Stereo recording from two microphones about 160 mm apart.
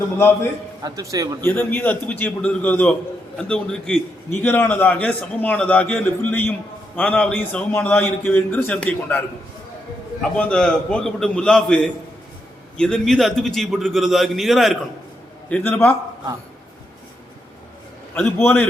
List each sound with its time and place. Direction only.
0.8 s a man's voice: 25° right (ahead or behind)
1.5 s a man's voice: 10° left (ahead or behind)
18.1 s a man's voice: 10° left (ahead or behind)